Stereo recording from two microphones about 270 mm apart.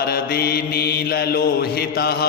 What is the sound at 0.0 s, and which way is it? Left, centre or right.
Mantra, left.